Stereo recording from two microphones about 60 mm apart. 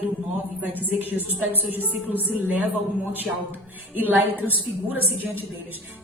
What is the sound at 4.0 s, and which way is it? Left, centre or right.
Speech, right.